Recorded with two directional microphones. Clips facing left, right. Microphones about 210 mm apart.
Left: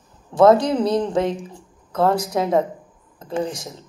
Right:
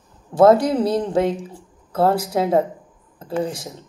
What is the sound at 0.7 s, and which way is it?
Speech, 25° right (ahead or behind).